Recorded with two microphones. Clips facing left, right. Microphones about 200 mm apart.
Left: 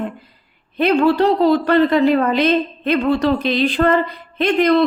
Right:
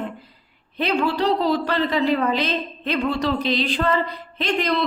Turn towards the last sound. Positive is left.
turn(degrees=55)  # may be behind; listen again after turning